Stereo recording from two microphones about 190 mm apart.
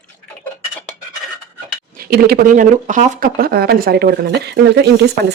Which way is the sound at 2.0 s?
55° right (ahead or behind).